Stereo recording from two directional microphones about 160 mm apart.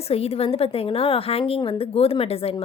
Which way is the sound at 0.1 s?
40° left (ahead or behind).